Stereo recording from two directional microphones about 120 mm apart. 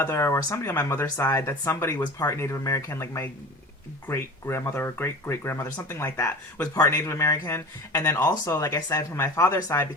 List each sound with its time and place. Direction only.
0.0 s speech: 20° left (ahead or behind)